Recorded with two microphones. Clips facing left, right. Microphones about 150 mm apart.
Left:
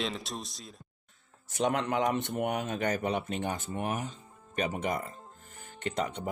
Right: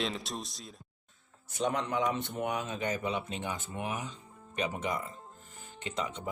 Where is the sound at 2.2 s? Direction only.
60° left (ahead or behind).